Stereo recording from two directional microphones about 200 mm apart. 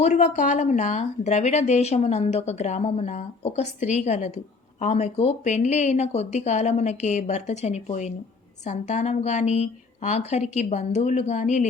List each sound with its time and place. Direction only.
0.0 s a woman's voice: 35° left (ahead or behind)